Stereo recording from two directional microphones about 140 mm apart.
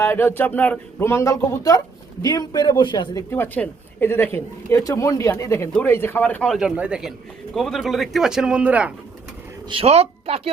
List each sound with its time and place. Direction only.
0.0 s speech: 15° left (ahead or behind); by 3.2 s 35° left (ahead or behind)
3.2 s speech: 15° left (ahead or behind); by 8.9 s 10° right (ahead or behind)
9.6 s a woman's voice: 45° right (ahead or behind)